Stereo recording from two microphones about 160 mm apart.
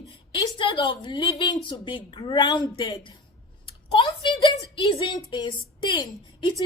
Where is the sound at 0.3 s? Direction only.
30° left (ahead or behind).